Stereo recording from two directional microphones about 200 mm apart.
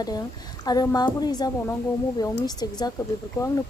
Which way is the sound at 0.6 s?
20° left (ahead or behind).